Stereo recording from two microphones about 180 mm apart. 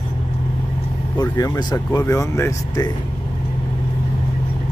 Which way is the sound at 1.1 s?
20° left (ahead or behind).